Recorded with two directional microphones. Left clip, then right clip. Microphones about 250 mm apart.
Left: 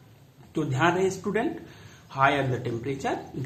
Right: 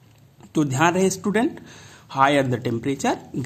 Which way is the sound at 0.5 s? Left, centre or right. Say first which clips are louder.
Right 5 dB; right.